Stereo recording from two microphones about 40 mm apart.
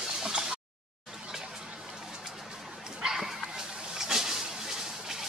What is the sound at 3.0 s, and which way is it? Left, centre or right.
Dog, centre.